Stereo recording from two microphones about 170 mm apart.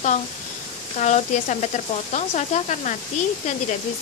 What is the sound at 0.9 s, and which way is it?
Speech, 45° left (ahead or behind).